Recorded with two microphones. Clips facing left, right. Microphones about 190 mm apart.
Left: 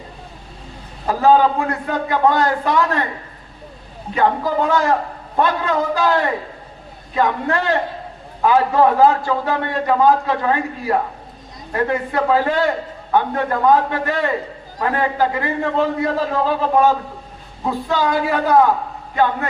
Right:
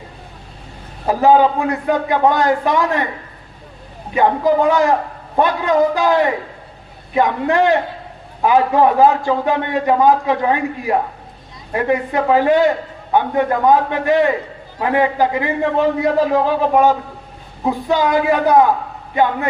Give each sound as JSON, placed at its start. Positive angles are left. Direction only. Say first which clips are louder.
{"t": 1.0, "sound": "a man's voice", "louder": "right 2 dB", "side_deg": -15}
{"t": 4.1, "sound": "a man's voice", "louder": "right 4 dB", "side_deg": -15}